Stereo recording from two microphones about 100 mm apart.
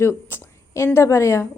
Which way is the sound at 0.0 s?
25° left (ahead or behind).